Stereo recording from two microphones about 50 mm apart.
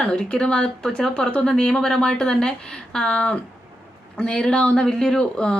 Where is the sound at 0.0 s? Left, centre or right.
Centre.